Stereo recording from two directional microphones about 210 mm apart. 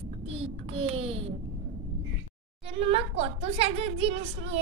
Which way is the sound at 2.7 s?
30° right (ahead or behind).